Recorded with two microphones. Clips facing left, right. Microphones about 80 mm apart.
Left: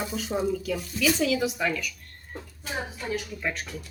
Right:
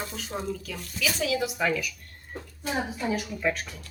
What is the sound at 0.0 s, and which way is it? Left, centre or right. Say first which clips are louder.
Speech: left 5 dB; centre.